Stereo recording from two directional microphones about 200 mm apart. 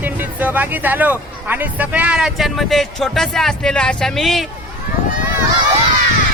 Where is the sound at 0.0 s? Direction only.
10° right (ahead or behind).